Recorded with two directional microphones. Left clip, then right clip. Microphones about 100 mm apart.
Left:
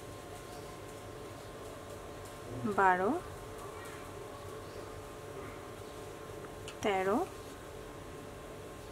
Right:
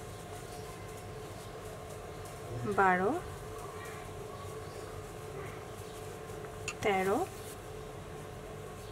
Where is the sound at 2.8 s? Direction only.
15° left (ahead or behind).